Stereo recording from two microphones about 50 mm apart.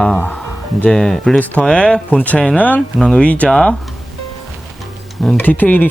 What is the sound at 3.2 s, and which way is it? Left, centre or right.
Speech, left.